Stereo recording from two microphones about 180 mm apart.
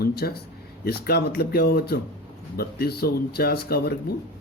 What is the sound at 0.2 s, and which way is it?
Speech, 60° left (ahead or behind).